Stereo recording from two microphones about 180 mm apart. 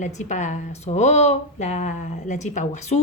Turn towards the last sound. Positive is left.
turn(degrees=40)  # may be behind; listen again after turning